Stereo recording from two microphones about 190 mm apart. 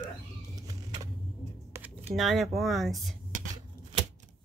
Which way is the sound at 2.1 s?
Centre (ahead or behind).